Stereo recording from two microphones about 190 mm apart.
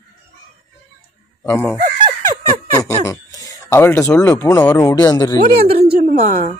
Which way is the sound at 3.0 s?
15° left (ahead or behind).